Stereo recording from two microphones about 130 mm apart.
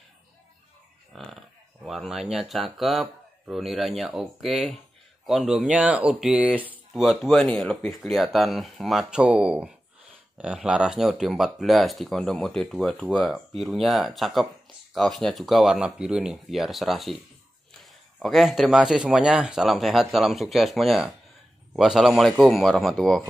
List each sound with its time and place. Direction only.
1.1 s speech: centre (ahead or behind)
6.9 s speech: centre (ahead or behind)